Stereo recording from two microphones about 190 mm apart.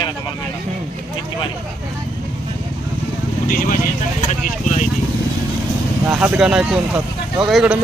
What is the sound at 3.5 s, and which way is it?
Speech, 45° left (ahead or behind).